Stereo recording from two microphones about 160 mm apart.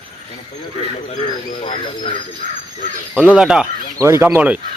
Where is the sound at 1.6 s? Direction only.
30° left (ahead or behind).